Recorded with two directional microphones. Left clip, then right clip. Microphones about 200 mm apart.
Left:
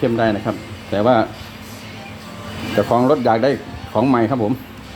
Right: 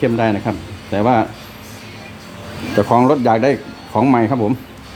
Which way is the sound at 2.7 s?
35° right (ahead or behind).